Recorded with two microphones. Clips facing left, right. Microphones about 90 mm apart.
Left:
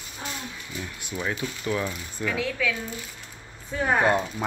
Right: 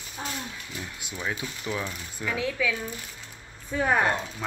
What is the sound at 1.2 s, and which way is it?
Speech, 10° right (ahead or behind).